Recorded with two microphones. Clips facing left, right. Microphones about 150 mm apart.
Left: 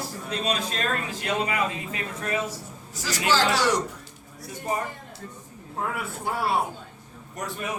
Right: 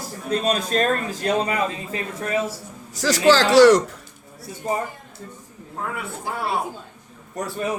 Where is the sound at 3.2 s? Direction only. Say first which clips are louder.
Right 10 dB; 85° right.